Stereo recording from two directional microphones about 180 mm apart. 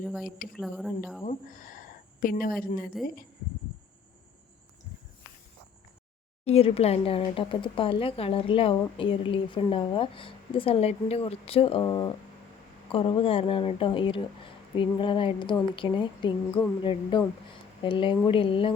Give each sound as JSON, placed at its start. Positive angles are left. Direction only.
{"t": 0.5, "sound": "speech", "side_deg": 0}
{"t": 1.2, "sound": "speech", "side_deg": 45}
{"t": 6.4, "sound": "speech", "side_deg": 35}
{"t": 11.8, "sound": "speech", "side_deg": 20}